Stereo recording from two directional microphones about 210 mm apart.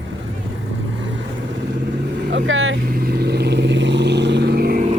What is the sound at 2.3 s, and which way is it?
Speech, 60° right (ahead or behind).